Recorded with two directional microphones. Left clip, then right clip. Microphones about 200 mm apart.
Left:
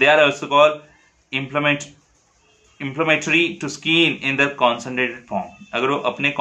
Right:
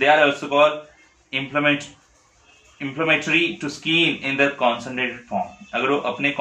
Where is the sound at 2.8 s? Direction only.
25° left (ahead or behind).